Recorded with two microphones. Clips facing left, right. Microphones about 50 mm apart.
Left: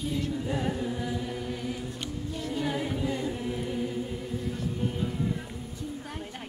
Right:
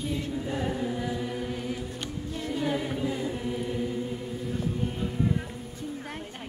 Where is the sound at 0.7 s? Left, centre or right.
Centre.